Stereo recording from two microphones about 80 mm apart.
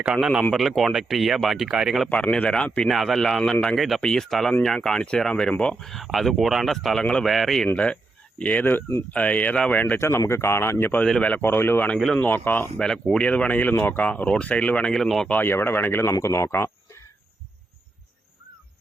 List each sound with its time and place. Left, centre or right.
0.0 s speech: centre
2.0 s speech: centre
2.9 s speech: centre
3.8 s speech: centre
8.4 s speech: left
10.0 s speech: left
11.0 s speech: centre
12.7 s speech: centre
15.3 s speech: left